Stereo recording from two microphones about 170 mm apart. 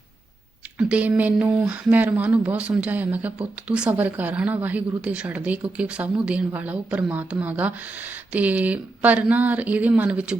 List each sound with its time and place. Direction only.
0.8 s speech: 5° right (ahead or behind)